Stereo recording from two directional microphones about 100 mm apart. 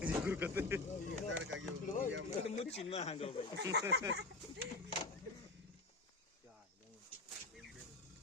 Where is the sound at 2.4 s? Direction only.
90° left; by 3.5 s 70° left (ahead or behind).